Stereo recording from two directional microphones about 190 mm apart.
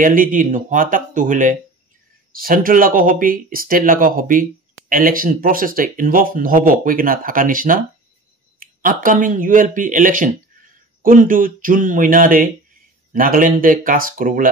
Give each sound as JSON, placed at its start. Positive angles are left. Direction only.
{"t": 0.0, "sound": "speech", "side_deg": -45}